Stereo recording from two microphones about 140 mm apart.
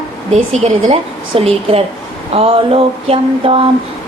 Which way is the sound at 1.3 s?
45° right (ahead or behind).